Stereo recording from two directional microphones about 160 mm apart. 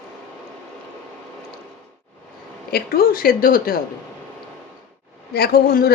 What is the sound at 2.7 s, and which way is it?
A woman's voice, 75° left (ahead or behind).